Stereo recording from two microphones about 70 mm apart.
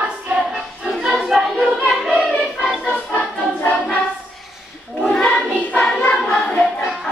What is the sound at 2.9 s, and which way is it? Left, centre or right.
Music, centre.